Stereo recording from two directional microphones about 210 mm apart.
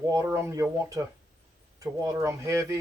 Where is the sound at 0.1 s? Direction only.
10° right (ahead or behind).